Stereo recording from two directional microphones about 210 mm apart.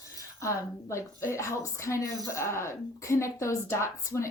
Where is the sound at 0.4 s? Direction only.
15° left (ahead or behind).